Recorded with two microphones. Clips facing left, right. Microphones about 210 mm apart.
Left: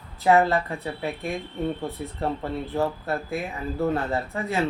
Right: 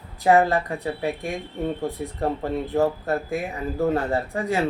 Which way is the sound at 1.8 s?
40° right (ahead or behind).